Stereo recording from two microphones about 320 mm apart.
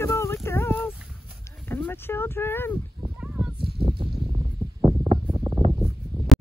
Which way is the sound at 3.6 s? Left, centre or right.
Centre.